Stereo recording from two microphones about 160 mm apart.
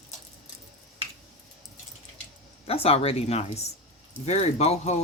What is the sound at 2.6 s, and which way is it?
Speech, 35° left (ahead or behind).